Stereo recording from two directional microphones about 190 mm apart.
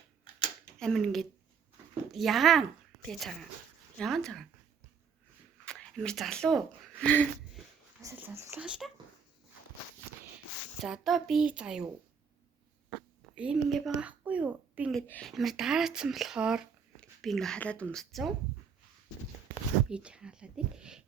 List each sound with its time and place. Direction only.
0.3 s camera: 25° left (ahead or behind)
0.8 s a woman's voice: 5° left (ahead or behind)
5.6 s speech: 5° left (ahead or behind)
8.0 s speech: 15° right (ahead or behind)
10.8 s speech: centre (ahead or behind)
13.3 s speech: 5° right (ahead or behind)
15.0 s speech: 5° left (ahead or behind)
19.9 s speech: 5° right (ahead or behind)